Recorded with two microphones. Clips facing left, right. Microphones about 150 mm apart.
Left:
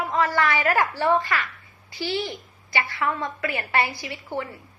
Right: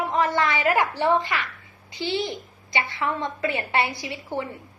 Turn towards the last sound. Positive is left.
turn(degrees=-20)  # may be behind; listen again after turning